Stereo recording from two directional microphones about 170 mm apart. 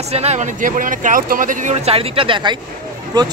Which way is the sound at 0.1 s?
40° right (ahead or behind).